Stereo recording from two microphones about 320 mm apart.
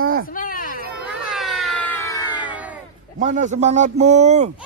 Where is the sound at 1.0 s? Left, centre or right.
Centre.